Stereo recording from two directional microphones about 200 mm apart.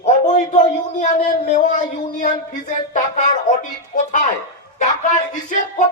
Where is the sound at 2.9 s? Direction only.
40° left (ahead or behind).